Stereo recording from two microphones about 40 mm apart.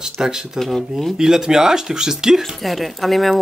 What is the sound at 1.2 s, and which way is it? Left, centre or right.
Speech, centre.